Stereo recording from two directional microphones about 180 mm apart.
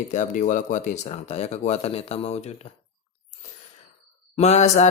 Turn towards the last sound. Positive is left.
turn(degrees=40)  # may be behind; listen again after turning